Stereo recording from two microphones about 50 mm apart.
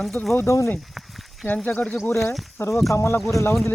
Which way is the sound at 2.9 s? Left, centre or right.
Left.